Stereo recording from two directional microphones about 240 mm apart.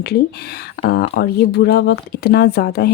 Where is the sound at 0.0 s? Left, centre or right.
Left.